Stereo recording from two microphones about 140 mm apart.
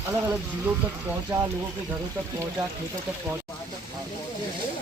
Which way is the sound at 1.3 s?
20° right (ahead or behind).